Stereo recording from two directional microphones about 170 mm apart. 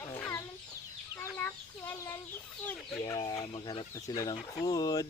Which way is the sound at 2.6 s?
10° left (ahead or behind).